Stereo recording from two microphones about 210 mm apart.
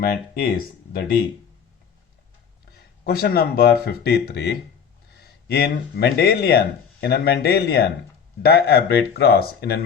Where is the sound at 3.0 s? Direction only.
45° left (ahead or behind).